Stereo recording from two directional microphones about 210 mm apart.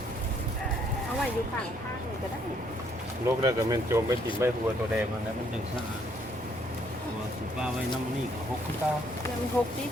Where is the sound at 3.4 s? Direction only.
15° right (ahead or behind).